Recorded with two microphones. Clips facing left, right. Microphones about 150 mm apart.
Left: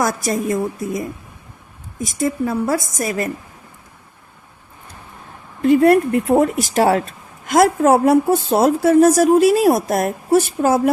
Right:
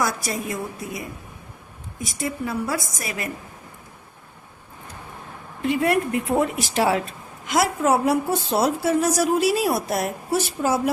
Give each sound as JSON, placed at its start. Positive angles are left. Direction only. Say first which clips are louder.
{"t": 0.0, "sound": "a woman's voice", "louder": "left 6 dB", "side_deg": 45}
{"t": 2.0, "sound": "a woman's voice", "louder": "left 8 dB", "side_deg": 45}
{"t": 5.6, "sound": "a woman's voice", "louder": "left 9 dB", "side_deg": 40}